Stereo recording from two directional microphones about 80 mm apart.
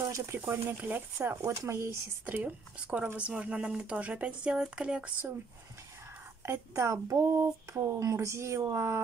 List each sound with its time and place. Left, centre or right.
0.1 s speech: right
1.6 s speech: right
2.2 s speech: centre
6.4 s speech: right